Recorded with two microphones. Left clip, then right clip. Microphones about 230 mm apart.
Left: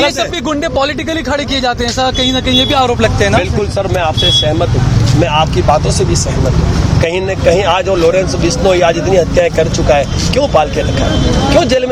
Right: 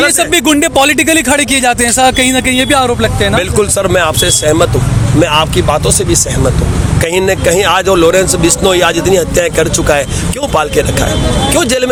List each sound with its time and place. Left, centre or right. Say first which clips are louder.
0.2 s speech: right 5 dB; right
3.0 s speech: even; centre
3.8 s speech: right 1 dB; right
7.0 s speech: right 2 dB; right
11.5 s speech: left 2 dB; right